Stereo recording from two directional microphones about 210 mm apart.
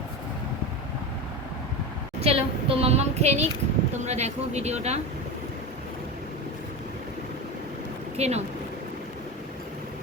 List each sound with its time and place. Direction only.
2.2 s speech: 30° right (ahead or behind)
8.1 s speech: 30° right (ahead or behind)